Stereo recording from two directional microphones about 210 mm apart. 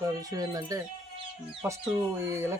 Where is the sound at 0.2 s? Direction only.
15° right (ahead or behind).